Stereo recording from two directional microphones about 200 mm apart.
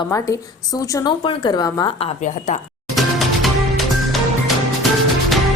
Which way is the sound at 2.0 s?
35° left (ahead or behind).